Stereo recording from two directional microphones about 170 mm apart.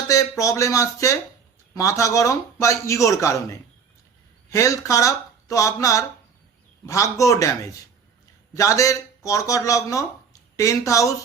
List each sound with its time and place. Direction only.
0.1 s a man's voice: 20° left (ahead or behind)